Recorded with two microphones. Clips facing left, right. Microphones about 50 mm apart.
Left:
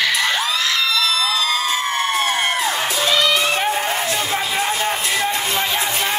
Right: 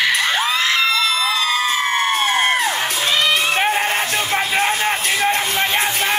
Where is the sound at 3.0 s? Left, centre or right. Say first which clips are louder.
Even; right.